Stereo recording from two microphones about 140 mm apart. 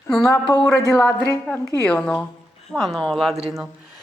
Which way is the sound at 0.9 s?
10° left (ahead or behind).